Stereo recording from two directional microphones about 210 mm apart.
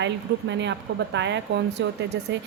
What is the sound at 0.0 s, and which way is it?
A woman's voice, 60° right (ahead or behind).